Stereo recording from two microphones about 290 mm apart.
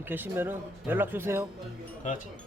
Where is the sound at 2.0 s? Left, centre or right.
Left.